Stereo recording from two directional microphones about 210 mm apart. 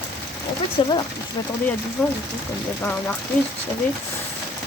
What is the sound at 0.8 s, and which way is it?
Speech, 25° left (ahead or behind).